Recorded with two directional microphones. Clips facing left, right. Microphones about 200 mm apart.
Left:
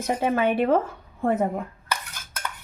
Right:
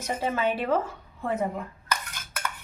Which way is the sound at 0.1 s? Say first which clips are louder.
Left 4 dB; 55° left (ahead or behind).